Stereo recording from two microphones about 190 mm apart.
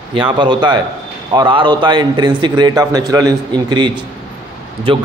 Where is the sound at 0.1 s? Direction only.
25° right (ahead or behind).